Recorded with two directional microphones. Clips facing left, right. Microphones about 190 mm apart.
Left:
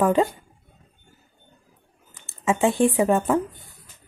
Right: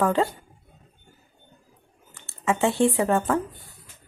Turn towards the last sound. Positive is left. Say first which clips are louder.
# left 3 dB
turn(degrees=15)  # may be behind; listen again after turning